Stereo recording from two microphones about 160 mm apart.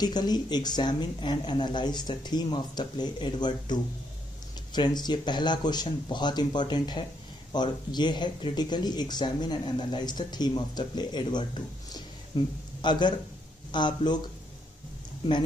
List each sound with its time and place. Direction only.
0.0 s speech: 25° left (ahead or behind)